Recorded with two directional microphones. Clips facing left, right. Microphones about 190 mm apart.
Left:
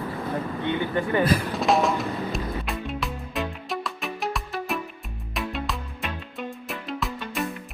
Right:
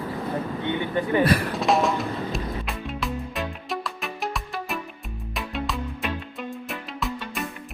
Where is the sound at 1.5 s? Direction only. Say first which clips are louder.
Even; centre (ahead or behind).